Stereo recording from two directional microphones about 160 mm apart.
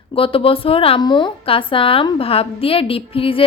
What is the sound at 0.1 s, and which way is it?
A woman's voice, 35° left (ahead or behind).